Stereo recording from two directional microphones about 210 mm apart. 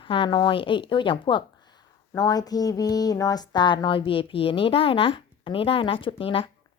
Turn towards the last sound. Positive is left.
turn(degrees=25)  # may be behind; listen again after turning